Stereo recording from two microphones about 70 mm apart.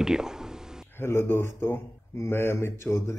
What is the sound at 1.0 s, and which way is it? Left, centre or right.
A man's voice, left.